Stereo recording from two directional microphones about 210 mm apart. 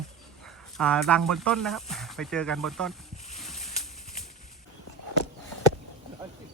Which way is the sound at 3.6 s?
30° left (ahead or behind).